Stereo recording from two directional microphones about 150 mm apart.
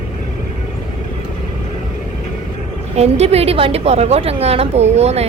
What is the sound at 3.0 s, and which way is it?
A woman's voice, 45° right (ahead or behind).